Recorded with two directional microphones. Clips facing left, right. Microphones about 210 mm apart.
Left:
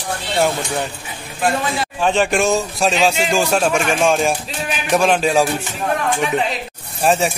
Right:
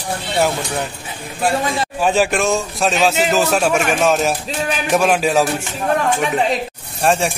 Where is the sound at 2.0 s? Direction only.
5° right (ahead or behind).